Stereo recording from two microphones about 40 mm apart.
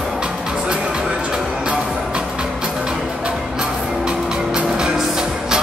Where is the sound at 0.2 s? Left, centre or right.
Right.